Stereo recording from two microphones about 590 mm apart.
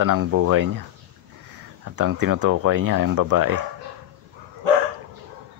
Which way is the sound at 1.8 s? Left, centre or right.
Right.